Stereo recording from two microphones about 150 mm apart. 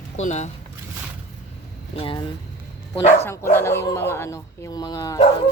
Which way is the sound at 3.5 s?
15° left (ahead or behind).